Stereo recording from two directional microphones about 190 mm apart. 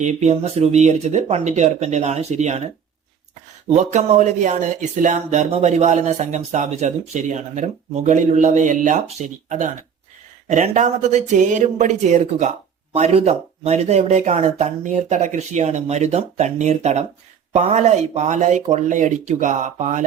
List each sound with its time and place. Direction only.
0.0 s speech: 35° right (ahead or behind)
3.7 s speech: 35° right (ahead or behind)